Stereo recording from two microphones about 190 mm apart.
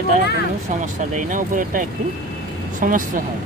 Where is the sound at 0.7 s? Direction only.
40° right (ahead or behind).